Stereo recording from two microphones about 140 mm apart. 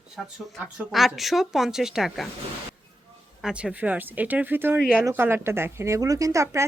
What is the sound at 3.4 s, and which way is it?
A woman's voice, 10° right (ahead or behind).